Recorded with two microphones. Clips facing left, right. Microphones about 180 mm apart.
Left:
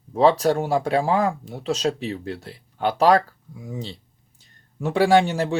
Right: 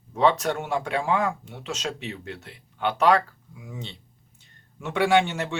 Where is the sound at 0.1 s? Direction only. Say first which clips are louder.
Left 5 dB; 35° left (ahead or behind).